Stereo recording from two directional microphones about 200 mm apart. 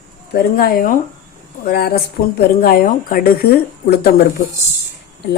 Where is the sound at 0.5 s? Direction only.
45° left (ahead or behind).